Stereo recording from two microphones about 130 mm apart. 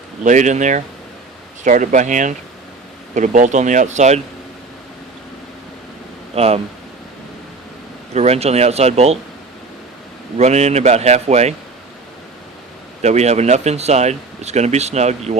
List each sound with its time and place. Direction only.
0.3 s speech: 70° right (ahead or behind)
6.3 s speech: 50° right (ahead or behind)
8.1 s speech: 55° right (ahead or behind)
10.3 s speech: 60° right (ahead or behind)
13.0 s speech: 60° right (ahead or behind)